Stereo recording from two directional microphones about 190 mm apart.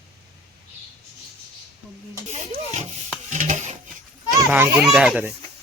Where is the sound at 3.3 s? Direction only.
40° right (ahead or behind).